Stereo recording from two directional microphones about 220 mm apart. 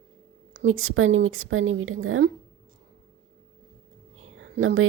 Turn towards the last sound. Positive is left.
turn(degrees=-65)  # may be behind; listen again after turning